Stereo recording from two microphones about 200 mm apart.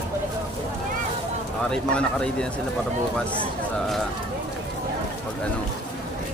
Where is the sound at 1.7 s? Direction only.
5° left (ahead or behind).